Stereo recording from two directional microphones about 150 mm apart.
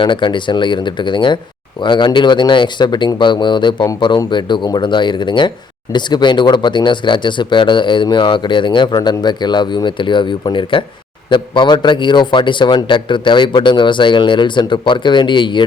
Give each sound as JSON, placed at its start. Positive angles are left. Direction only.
{"t": 0.0, "sound": "speech", "side_deg": 30}